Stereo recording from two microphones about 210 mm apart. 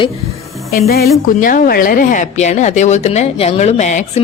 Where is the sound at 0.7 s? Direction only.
45° left (ahead or behind).